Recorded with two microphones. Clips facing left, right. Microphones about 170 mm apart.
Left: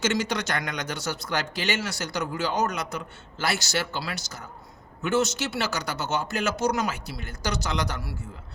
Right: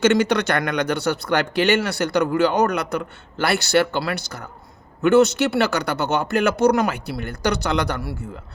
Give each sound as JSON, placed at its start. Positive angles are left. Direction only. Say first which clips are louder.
{"t": 0.0, "sound": "speech", "louder": "right 9 dB", "side_deg": -60}